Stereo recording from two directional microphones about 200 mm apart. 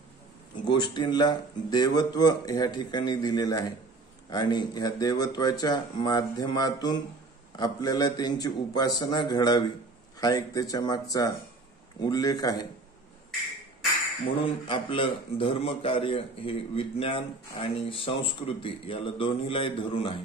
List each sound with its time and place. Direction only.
0.7 s a man's voice: 20° left (ahead or behind)
14.4 s a man's voice: 25° left (ahead or behind)